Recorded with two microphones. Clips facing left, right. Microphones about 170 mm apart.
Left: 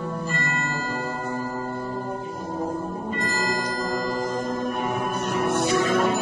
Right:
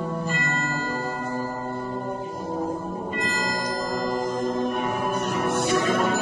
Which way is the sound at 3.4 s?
Centre (ahead or behind).